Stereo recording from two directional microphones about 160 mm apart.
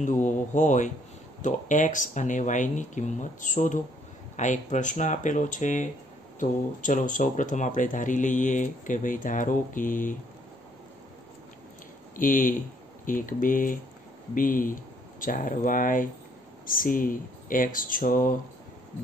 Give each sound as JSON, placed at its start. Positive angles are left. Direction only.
{"t": 0.0, "sound": "speech", "side_deg": 50}
{"t": 12.2, "sound": "speech", "side_deg": 55}